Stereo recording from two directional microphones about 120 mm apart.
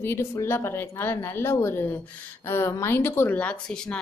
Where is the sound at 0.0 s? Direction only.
20° left (ahead or behind).